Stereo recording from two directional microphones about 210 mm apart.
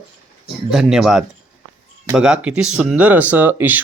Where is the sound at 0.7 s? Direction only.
Centre (ahead or behind).